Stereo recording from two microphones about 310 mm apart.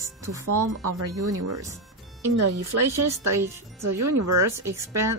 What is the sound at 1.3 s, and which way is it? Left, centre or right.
Speech, right.